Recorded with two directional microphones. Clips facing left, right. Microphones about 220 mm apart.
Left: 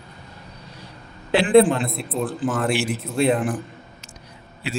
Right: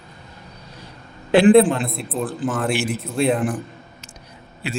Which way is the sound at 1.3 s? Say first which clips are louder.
Right 8 dB; 50° right (ahead or behind).